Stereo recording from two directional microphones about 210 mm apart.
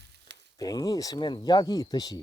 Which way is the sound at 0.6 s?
15° left (ahead or behind).